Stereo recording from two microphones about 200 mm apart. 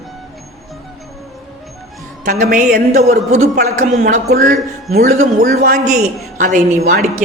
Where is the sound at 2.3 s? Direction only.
45° right (ahead or behind).